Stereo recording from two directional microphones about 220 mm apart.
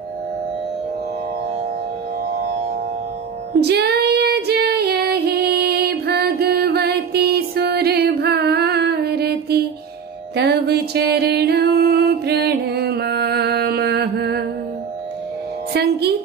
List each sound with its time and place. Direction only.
3.6 s female singing: 45° right (ahead or behind)
10.3 s music: 50° right (ahead or behind)
15.7 s a sound: 50° right (ahead or behind)